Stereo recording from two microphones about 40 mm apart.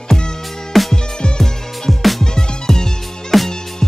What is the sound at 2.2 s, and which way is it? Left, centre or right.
Music, centre.